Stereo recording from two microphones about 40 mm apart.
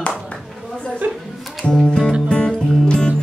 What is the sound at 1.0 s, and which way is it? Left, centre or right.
Music, right.